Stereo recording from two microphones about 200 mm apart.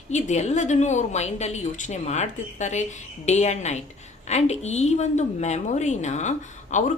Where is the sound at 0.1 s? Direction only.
35° left (ahead or behind).